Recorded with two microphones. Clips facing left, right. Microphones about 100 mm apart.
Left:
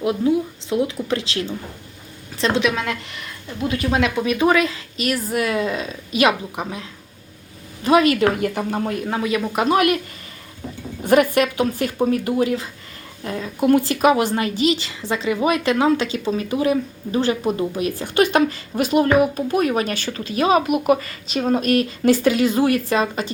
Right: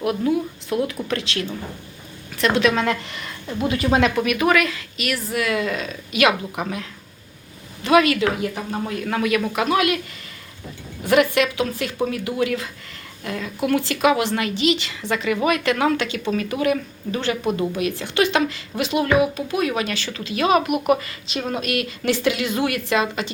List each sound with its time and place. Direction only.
0.0 s a woman's voice: 25° left (ahead or behind)
2.7 s speech: centre (ahead or behind)
4.1 s speech: 25° left (ahead or behind)
7.9 s speech: 35° left (ahead or behind)
8.2 s speech: 50° left (ahead or behind)
9.0 s speech: 25° left (ahead or behind)
9.6 s speech: 40° left (ahead or behind)
11.0 s speech: 40° left (ahead or behind)